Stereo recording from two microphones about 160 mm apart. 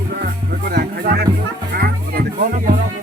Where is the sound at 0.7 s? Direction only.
85° right.